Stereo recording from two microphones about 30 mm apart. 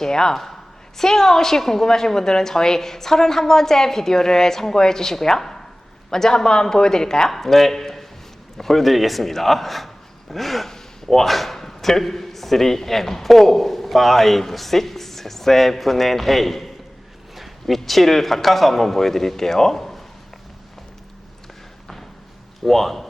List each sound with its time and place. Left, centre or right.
0.0 s a woman's voice: left
5.4 s a sound: centre
6.1 s speech: centre
7.3 s a woman's voice: centre
17.3 s a sound: centre
17.7 s a woman's voice: centre
22.6 s a woman's voice: centre